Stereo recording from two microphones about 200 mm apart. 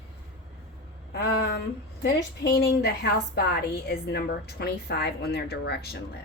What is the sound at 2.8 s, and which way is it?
A woman's voice, 50° left (ahead or behind).